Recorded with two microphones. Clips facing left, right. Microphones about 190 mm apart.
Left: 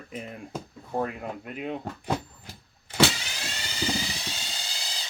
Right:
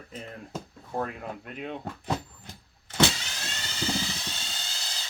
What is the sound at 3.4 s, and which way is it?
Vehicle, 10° left (ahead or behind).